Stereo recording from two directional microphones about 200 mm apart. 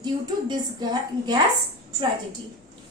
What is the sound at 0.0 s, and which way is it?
A woman's voice, 20° right (ahead or behind).